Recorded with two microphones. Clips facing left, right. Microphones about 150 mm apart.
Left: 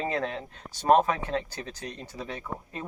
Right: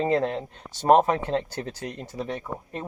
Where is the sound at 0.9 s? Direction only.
25° right (ahead or behind).